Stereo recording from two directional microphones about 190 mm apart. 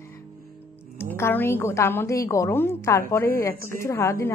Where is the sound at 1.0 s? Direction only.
10° left (ahead or behind).